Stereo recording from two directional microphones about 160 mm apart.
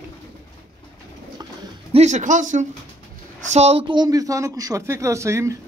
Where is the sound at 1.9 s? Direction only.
45° right (ahead or behind).